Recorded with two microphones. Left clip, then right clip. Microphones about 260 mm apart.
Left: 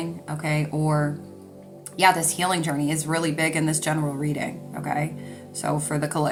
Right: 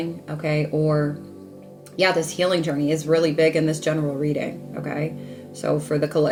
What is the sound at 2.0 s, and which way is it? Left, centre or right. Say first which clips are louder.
Speech: even; centre.